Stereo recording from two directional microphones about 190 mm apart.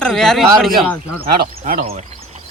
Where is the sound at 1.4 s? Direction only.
50° right (ahead or behind).